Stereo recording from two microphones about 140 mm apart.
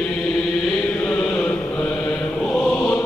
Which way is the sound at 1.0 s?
10° left (ahead or behind).